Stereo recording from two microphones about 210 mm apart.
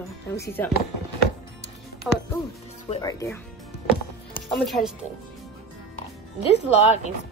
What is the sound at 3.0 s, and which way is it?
Speech, 15° left (ahead or behind).